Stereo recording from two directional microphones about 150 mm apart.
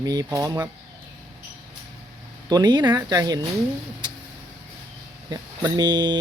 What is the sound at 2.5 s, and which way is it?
Speech, 30° right (ahead or behind).